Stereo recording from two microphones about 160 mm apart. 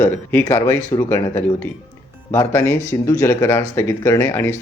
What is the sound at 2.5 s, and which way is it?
Speech, 15° left (ahead or behind).